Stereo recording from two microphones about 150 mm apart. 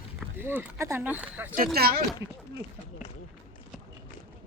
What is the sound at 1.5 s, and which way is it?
Speech, 85° right.